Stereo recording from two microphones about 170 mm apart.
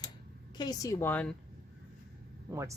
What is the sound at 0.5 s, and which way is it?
Speech, 25° left (ahead or behind).